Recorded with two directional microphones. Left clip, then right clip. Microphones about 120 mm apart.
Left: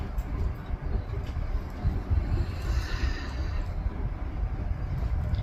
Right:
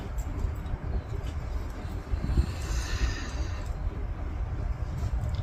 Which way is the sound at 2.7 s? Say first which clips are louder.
Left 2 dB; 20° right (ahead or behind).